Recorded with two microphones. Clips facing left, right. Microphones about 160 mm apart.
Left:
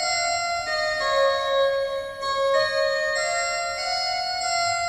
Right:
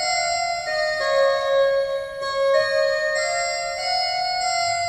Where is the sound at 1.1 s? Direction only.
40° right (ahead or behind).